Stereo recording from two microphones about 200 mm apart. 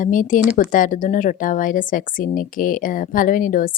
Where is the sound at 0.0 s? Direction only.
40° left (ahead or behind).